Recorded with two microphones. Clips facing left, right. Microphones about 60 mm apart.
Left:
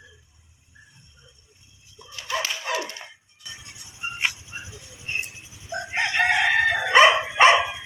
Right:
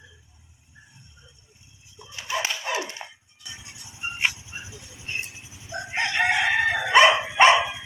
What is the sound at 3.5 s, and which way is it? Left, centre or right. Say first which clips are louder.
Music: even; centre.